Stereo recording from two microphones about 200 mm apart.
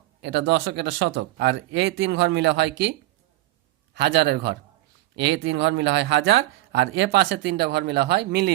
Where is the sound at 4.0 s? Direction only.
55° right (ahead or behind).